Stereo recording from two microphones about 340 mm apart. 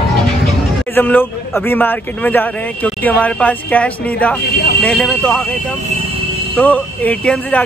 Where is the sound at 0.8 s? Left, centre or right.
Centre.